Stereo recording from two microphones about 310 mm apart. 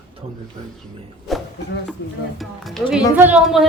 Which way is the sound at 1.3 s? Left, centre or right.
Centre.